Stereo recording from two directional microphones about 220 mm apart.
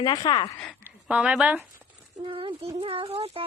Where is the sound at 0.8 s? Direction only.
5° right (ahead or behind).